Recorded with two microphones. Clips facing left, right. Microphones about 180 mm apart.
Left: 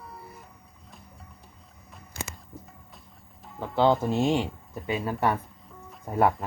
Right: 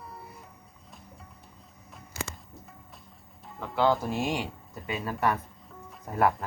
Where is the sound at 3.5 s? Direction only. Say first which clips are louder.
Left 3 dB; 25° left (ahead or behind).